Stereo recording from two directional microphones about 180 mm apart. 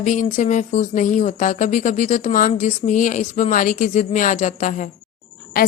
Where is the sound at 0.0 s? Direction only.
45° left (ahead or behind).